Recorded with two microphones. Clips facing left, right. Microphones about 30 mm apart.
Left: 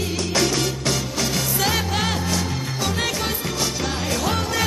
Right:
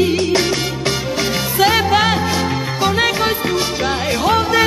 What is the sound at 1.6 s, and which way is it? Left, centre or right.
Music, right.